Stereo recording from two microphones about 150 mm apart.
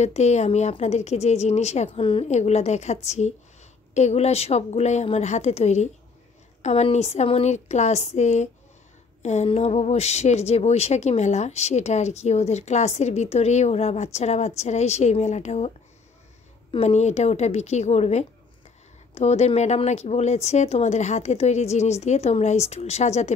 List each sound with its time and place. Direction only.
0.0 s speech: 50° left (ahead or behind)
1.9 s speech: 35° left (ahead or behind)
16.7 s speech: 45° left (ahead or behind)